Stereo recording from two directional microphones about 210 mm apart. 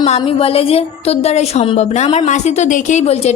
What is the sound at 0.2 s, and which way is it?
A woman's voice, 25° left (ahead or behind).